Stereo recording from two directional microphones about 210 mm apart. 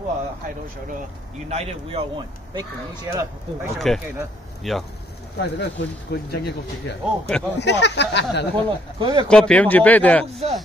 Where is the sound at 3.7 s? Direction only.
Centre (ahead or behind).